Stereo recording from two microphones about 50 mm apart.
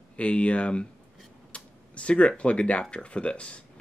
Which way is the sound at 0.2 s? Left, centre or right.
Left.